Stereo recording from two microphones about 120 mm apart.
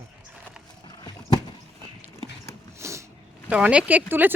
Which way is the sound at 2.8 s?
25° right (ahead or behind).